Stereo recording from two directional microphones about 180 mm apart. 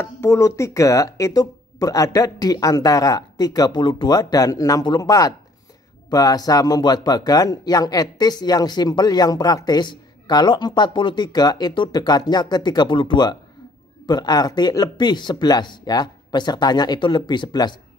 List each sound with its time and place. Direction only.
0.0 s speech: 15° left (ahead or behind)